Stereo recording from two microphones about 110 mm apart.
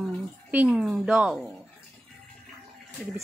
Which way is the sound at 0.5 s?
15° right (ahead or behind).